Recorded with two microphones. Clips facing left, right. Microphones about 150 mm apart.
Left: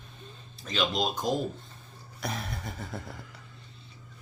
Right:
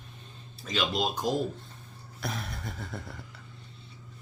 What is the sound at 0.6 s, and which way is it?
Speech, 5° right (ahead or behind).